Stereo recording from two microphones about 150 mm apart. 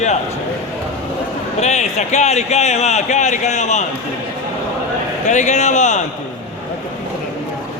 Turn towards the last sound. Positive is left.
turn(degrees=50)  # may be behind; listen again after turning